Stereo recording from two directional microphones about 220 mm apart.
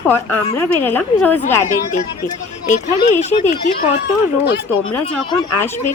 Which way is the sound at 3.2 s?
30° left (ahead or behind).